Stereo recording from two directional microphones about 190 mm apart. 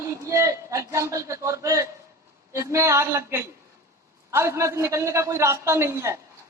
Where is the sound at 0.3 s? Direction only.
15° right (ahead or behind).